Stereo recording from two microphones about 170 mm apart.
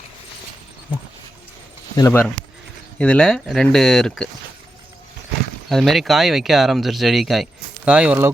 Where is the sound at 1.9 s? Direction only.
20° left (ahead or behind).